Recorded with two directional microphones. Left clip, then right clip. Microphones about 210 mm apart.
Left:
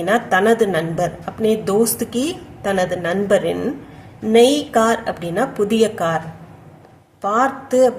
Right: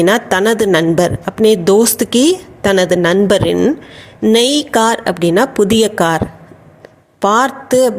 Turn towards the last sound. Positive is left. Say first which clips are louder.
# right 3 dB
turn(degrees=-40)  # may be behind; listen again after turning